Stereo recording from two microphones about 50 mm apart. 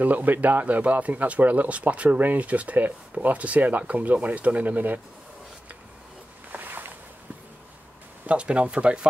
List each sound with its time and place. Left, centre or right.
0.0 s speech: right
6.5 s a sound: right
8.3 s speech: right